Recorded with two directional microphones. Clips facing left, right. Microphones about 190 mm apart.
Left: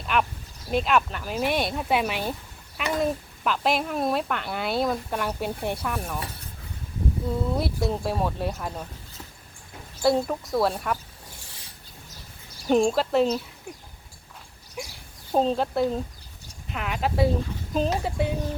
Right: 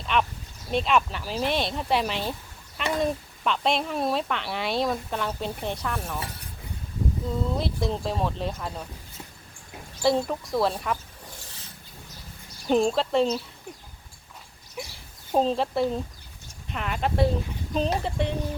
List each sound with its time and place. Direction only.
0.1 s a woman's voice: 5° left (ahead or behind)
7.3 s a woman's voice: 5° left (ahead or behind)
10.0 s a woman's voice: centre (ahead or behind)
12.6 s a woman's voice: centre (ahead or behind)
15.3 s a woman's voice: centre (ahead or behind)